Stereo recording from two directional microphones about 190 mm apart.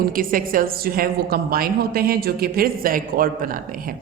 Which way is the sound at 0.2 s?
45° right (ahead or behind).